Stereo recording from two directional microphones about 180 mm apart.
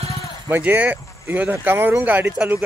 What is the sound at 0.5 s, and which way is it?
A man's voice, 10° right (ahead or behind).